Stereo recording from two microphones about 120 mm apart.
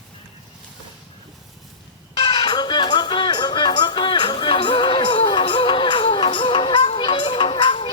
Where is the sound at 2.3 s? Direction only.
40° left (ahead or behind).